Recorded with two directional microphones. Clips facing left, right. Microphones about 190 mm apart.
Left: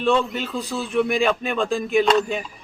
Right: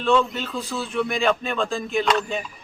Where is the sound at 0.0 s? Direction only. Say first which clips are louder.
Even; 15° left (ahead or behind).